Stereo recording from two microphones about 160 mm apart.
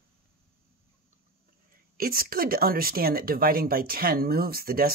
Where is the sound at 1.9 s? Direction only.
65° right (ahead or behind).